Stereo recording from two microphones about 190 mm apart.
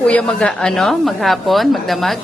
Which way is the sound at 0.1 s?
5° left (ahead or behind).